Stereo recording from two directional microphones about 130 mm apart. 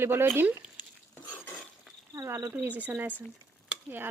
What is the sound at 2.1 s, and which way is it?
Speech, 25° right (ahead or behind).